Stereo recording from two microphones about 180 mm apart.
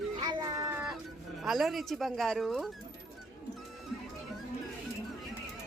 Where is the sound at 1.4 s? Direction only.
Centre (ahead or behind).